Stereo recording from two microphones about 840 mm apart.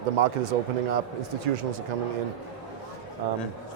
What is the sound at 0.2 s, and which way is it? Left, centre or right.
Speech, right.